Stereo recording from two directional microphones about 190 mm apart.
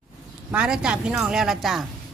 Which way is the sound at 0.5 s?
5° right (ahead or behind).